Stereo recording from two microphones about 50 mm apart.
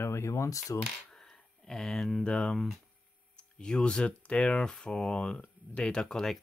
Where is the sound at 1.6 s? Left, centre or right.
Centre.